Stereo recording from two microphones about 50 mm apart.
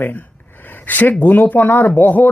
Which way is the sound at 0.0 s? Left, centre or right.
Left.